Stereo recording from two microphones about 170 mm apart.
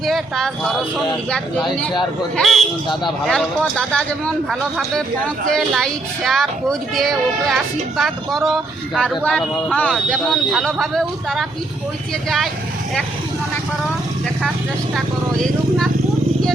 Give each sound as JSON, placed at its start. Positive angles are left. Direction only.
{"t": 0.0, "sound": "a woman's voice", "side_deg": 0}
{"t": 2.3, "sound": "a woman's voice", "side_deg": 0}
{"t": 14.9, "sound": "speech", "side_deg": 0}